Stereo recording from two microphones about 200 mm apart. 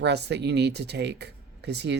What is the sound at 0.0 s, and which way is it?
Speech, 55° right (ahead or behind).